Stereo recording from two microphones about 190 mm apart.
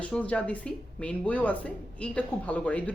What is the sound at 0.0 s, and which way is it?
Speech, 5° left (ahead or behind).